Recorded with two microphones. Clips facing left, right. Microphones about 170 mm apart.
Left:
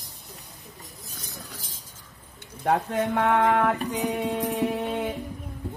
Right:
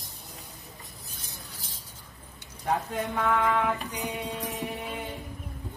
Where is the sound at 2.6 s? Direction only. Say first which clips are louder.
Left 5 dB; 65° left (ahead or behind); by 3.9 s 50° left (ahead or behind).